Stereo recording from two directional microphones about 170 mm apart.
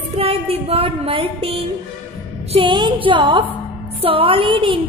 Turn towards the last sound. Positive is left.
turn(degrees=-30)  # may be behind; listen again after turning